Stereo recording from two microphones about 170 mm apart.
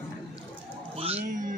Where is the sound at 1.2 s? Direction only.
50° right (ahead or behind).